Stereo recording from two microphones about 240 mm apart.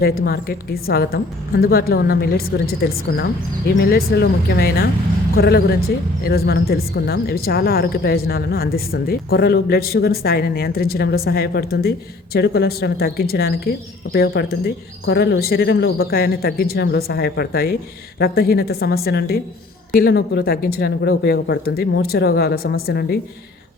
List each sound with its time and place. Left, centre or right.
0.0 s a woman's voice: left